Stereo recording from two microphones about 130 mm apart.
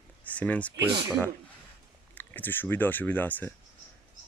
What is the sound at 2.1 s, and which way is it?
Speech, 15° left (ahead or behind).